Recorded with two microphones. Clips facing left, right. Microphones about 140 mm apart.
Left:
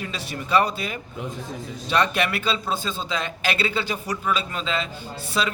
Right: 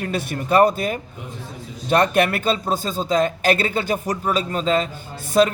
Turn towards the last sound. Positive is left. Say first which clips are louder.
# right 9 dB
turn(degrees=-50)  # may be behind; listen again after turning